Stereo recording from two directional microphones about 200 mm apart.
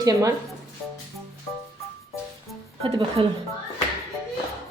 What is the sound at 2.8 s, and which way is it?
Speech, 25° right (ahead or behind).